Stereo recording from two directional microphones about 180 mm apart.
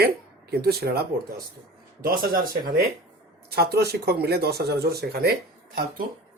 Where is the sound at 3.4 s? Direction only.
60° right (ahead or behind).